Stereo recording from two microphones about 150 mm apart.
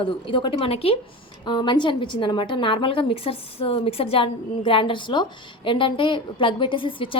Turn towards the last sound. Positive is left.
turn(degrees=35)  # may be behind; listen again after turning